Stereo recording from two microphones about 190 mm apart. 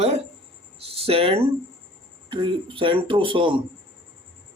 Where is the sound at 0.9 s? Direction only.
30° right (ahead or behind).